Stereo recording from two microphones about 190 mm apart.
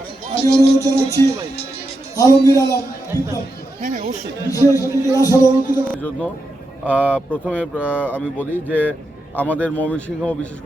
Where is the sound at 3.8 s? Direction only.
45° right (ahead or behind).